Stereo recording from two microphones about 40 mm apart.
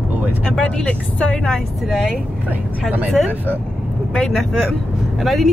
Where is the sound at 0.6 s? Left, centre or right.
Left.